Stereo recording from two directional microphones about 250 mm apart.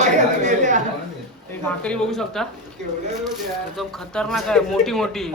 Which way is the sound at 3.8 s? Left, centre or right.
Centre.